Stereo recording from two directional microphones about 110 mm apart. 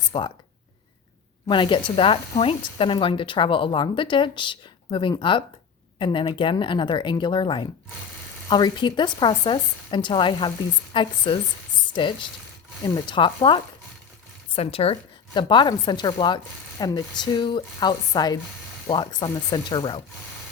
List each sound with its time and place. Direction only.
0.1 s a woman's voice: 50° left (ahead or behind)
1.5 s a woman's voice: 50° left (ahead or behind)
14.5 s speech: 60° left (ahead or behind)
15.3 s a woman's voice: 45° left (ahead or behind)